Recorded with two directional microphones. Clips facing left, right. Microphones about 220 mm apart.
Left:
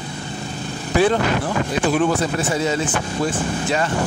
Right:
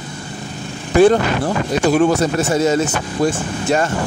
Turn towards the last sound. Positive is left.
turn(degrees=-45)  # may be behind; listen again after turning